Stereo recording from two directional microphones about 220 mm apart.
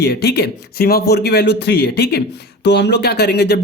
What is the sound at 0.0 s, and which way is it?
Speech, 50° left (ahead or behind).